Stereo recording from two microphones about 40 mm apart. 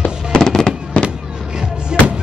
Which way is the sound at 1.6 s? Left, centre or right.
Right.